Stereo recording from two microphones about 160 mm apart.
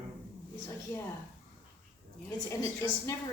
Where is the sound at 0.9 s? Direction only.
10° left (ahead or behind).